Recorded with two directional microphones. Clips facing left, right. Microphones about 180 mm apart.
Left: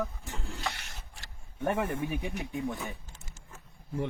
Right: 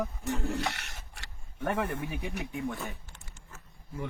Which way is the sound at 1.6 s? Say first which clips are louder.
Left 1 dB; 20° left (ahead or behind).